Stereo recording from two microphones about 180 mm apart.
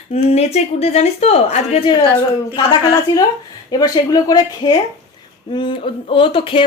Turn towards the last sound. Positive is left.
turn(degrees=30)  # may be behind; listen again after turning